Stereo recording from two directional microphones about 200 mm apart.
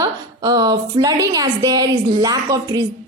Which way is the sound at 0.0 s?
20° right (ahead or behind).